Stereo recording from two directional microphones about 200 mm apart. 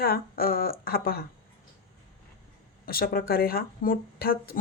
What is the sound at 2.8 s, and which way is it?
Speech, 45° left (ahead or behind).